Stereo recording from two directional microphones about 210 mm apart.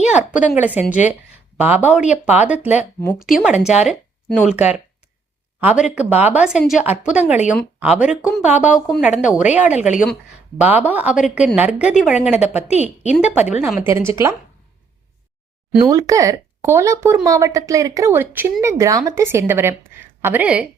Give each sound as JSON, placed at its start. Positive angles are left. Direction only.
{"t": 0.1, "sound": "a woman's voice", "side_deg": -5}
{"t": 5.8, "sound": "a woman's voice", "side_deg": -5}
{"t": 12.7, "sound": "a woman's voice", "side_deg": 30}
{"t": 13.1, "sound": "a woman's voice", "side_deg": -5}
{"t": 15.9, "sound": "a woman's voice", "side_deg": -15}